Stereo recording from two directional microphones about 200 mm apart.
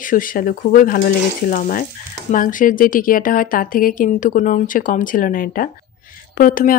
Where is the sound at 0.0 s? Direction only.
45° left (ahead or behind).